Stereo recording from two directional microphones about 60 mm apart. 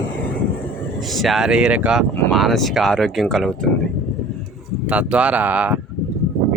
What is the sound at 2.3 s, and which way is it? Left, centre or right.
Speech, centre.